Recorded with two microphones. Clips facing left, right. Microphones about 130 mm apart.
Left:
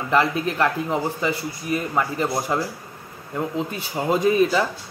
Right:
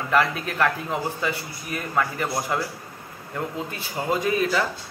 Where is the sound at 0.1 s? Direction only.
20° left (ahead or behind).